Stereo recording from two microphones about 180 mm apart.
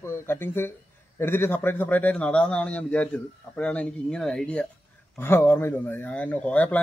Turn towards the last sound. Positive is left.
turn(degrees=10)  # may be behind; listen again after turning